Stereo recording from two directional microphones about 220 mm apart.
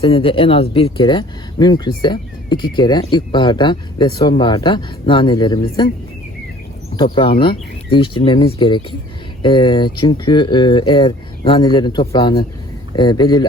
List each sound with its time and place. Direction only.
0.0 s speech: 25° left (ahead or behind)
6.9 s speech: 25° left (ahead or behind)